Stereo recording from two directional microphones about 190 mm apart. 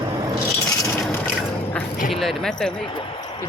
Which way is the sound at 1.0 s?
5° left (ahead or behind).